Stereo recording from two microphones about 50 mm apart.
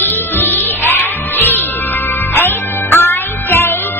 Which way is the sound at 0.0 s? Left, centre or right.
Left.